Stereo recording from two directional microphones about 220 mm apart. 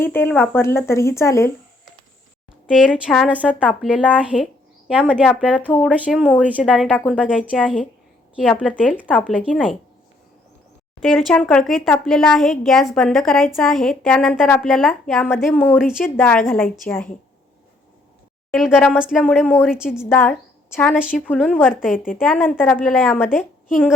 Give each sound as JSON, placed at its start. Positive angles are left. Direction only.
{"t": 0.0, "sound": "speech", "side_deg": 10}
{"t": 2.6, "sound": "speech", "side_deg": -5}
{"t": 5.6, "sound": "speech", "side_deg": 5}
{"t": 11.0, "sound": "speech", "side_deg": 0}
{"t": 15.8, "sound": "speech", "side_deg": -5}
{"t": 16.1, "sound": "speech", "side_deg": 10}
{"t": 18.5, "sound": "speech", "side_deg": 0}
{"t": 20.1, "sound": "speech", "side_deg": 10}
{"t": 21.9, "sound": "a woman's voice", "side_deg": 40}
{"t": 22.2, "sound": "speech", "side_deg": 5}